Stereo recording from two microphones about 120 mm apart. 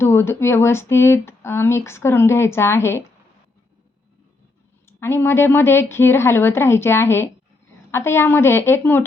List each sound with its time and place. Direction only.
0.0 s speech: 20° left (ahead or behind)
4.9 s speech: 20° left (ahead or behind)